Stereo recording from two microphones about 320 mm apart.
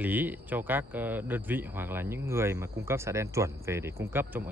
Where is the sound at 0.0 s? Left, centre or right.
Centre.